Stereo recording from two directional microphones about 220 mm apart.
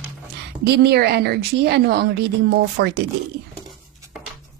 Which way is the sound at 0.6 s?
45° right (ahead or behind).